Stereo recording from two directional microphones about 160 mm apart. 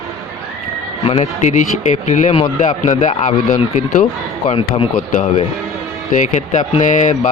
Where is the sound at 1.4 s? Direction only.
50° left (ahead or behind).